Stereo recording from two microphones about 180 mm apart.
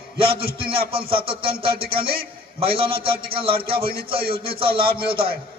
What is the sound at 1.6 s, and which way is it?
A man's voice, 30° right (ahead or behind).